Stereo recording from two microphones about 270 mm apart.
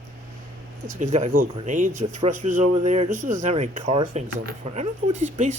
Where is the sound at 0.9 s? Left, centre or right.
Right.